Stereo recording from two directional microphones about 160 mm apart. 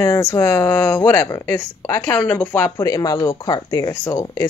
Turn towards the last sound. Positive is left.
turn(degrees=20)  # may be behind; listen again after turning